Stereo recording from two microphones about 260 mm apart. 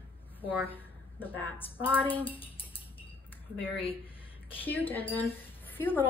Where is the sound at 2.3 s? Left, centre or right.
Left.